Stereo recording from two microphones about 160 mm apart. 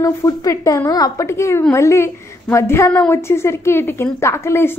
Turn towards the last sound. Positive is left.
turn(degrees=15)  # may be behind; listen again after turning